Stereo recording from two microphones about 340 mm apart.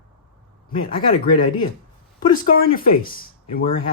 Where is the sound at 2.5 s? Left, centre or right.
Left.